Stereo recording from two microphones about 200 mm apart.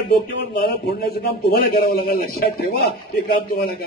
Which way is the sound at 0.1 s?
55° left (ahead or behind).